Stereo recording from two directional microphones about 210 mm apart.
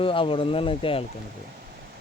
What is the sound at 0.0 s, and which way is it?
Speech, 25° left (ahead or behind).